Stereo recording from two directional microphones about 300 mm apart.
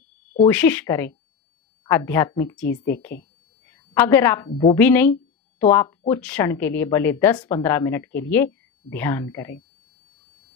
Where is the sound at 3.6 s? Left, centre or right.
Centre.